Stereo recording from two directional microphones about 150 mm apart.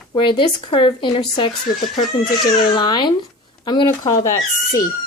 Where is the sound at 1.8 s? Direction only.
Centre (ahead or behind).